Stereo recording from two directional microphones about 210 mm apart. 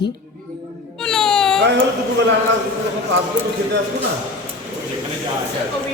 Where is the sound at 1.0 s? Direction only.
Centre (ahead or behind).